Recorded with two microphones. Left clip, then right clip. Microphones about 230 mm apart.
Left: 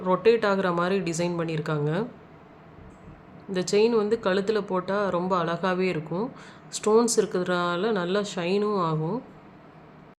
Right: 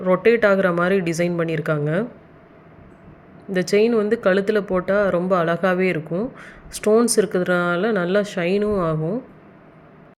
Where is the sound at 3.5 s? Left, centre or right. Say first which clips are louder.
Right 4 dB; centre.